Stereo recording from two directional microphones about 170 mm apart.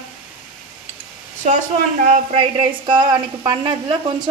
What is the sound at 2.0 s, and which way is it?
A woman's voice, 40° right (ahead or behind).